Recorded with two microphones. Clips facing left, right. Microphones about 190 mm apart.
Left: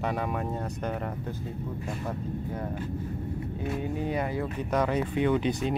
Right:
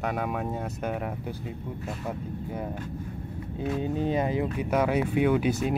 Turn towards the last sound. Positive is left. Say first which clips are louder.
# right 2 dB
turn(degrees=-5)  # may be behind; listen again after turning